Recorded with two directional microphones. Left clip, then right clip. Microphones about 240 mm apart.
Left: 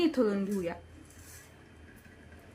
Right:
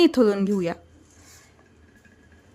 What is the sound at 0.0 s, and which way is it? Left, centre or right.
Speech, right.